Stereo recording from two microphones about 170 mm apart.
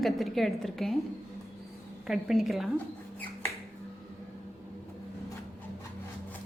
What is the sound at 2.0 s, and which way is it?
Speech, centre (ahead or behind).